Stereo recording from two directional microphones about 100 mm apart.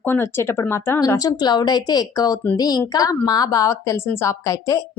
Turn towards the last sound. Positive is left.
turn(degrees=35)  # may be behind; listen again after turning